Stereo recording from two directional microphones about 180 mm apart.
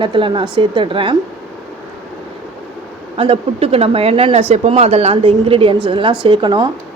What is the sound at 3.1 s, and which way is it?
Speech, 30° right (ahead or behind).